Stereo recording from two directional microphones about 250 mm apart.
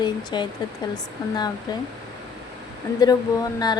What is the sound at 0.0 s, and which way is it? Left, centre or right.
Speech, centre.